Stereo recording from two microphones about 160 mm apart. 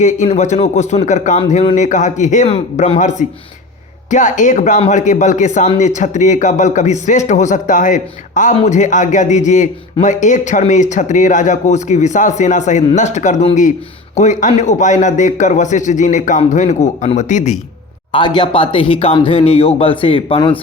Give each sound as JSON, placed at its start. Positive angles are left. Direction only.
{"t": 0.0, "sound": "a man's voice", "side_deg": 45}
{"t": 18.1, "sound": "speech", "side_deg": 30}